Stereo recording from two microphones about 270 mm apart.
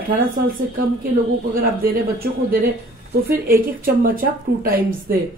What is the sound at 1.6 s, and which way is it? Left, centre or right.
Speech, right.